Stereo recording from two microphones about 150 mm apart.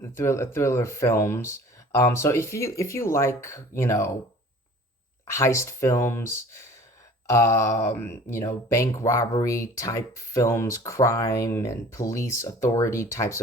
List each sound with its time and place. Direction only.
0.0 s speech: 15° left (ahead or behind)
5.3 s speech: 20° left (ahead or behind)